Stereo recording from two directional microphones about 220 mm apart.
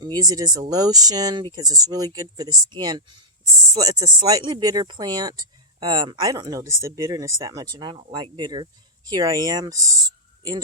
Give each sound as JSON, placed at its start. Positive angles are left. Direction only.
{"t": 0.0, "sound": "speech", "side_deg": -15}